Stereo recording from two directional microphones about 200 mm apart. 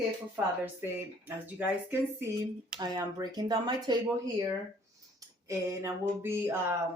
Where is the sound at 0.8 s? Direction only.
10° right (ahead or behind).